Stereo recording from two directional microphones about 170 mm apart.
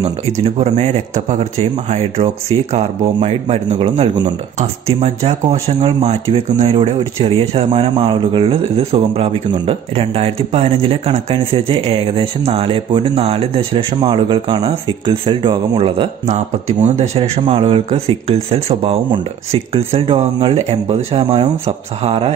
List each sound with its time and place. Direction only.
0.0 s speech: 35° right (ahead or behind)